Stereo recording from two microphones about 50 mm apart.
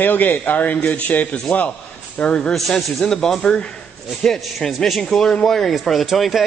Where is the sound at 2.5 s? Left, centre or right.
Centre.